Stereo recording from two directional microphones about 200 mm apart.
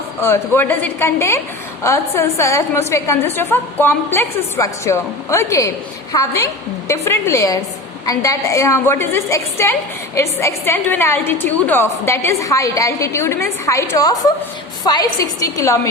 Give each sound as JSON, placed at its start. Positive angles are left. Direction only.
{"t": 0.2, "sound": "a woman's voice", "side_deg": 10}